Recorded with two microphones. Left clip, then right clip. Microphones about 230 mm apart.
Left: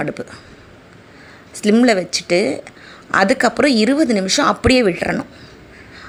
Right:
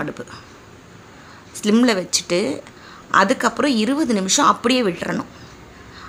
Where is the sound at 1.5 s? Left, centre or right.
Centre.